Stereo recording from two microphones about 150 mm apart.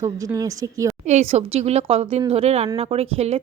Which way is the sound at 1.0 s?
45° right (ahead or behind).